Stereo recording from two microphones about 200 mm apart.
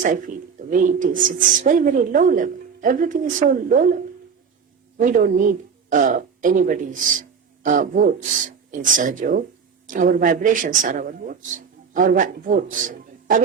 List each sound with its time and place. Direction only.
0.0 s speech: 40° right (ahead or behind)
4.9 s speech: 40° right (ahead or behind)